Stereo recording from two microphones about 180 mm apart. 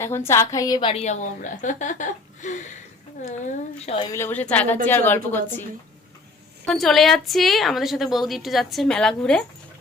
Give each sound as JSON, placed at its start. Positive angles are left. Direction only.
{"t": 0.3, "sound": "a woman's voice", "side_deg": 15}
{"t": 4.1, "sound": "a woman's voice", "side_deg": 10}
{"t": 6.7, "sound": "a woman's voice", "side_deg": 0}